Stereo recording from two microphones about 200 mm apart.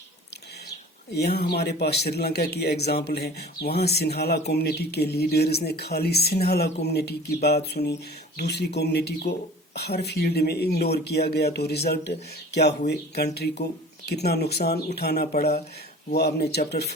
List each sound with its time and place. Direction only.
1.1 s speech: 55° left (ahead or behind)